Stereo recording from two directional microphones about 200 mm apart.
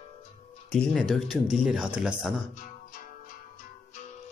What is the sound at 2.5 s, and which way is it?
Music, 45° left (ahead or behind).